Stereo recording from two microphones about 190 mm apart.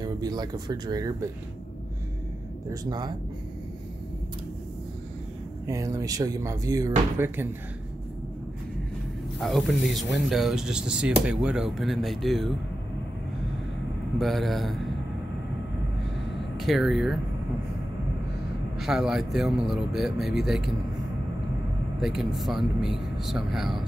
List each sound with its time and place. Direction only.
0.0 s speech: 20° right (ahead or behind)
2.7 s speech: 20° right (ahead or behind)
5.7 s speech: 15° right (ahead or behind)
9.4 s speech: centre (ahead or behind)
14.1 s speech: centre (ahead or behind)
16.5 s speech: centre (ahead or behind)
18.8 s speech: centre (ahead or behind)
22.0 s speech: centre (ahead or behind)